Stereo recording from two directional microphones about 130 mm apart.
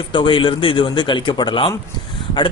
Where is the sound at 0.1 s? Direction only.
40° left (ahead or behind).